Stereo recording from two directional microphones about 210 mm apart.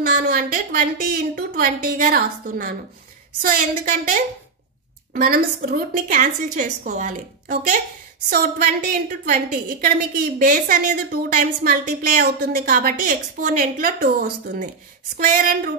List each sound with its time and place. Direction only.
0.0 s a woman's voice: 40° right (ahead or behind)